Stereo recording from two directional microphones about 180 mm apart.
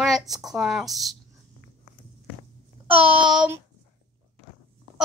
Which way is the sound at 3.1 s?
5° right (ahead or behind).